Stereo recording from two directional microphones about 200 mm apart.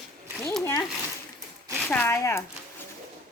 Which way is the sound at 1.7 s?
5° left (ahead or behind).